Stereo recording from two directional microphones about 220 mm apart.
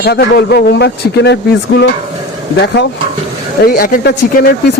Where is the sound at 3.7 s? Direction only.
40° left (ahead or behind).